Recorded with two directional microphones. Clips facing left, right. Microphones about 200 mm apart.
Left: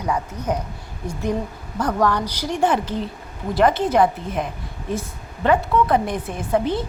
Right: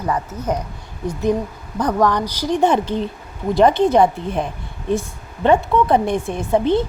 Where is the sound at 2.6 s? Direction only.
25° right (ahead or behind).